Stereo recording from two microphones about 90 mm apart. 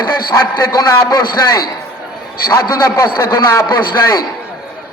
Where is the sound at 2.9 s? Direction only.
30° left (ahead or behind).